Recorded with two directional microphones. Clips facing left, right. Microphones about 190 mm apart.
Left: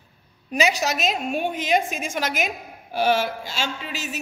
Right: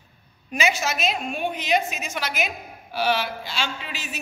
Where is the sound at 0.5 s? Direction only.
35° left (ahead or behind).